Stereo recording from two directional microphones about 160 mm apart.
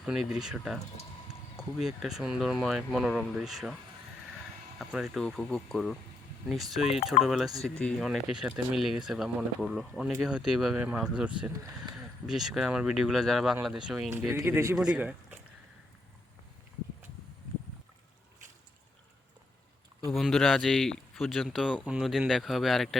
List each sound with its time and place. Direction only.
0.3 s speech: 5° right (ahead or behind)
2.0 s speech: 5° right (ahead or behind)
4.9 s speech: 5° right (ahead or behind)
14.3 s speech: 15° right (ahead or behind)
20.1 s speech: centre (ahead or behind)